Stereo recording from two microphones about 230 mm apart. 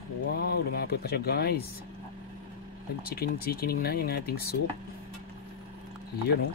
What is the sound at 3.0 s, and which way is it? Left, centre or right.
Speech, left.